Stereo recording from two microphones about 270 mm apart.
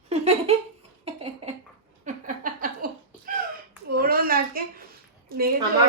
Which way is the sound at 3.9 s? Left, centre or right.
Right.